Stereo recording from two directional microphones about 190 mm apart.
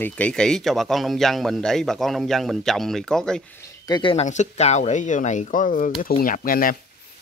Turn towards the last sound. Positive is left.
turn(degrees=50)  # may be behind; listen again after turning